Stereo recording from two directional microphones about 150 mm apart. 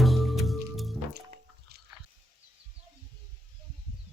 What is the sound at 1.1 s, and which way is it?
Music, 90° right.